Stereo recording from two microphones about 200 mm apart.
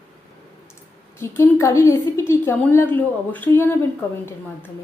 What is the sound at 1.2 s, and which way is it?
A woman's voice, 15° left (ahead or behind).